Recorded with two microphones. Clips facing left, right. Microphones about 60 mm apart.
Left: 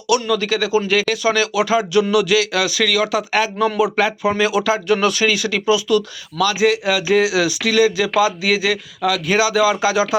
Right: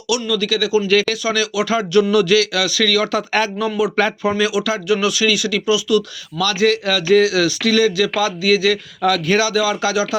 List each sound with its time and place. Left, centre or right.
0.1 s speech: left
0.9 s speech: centre
1.2 s speech: left
1.7 s speech: centre
3.8 s speech: left
6.4 s speech: centre
9.0 s speech: centre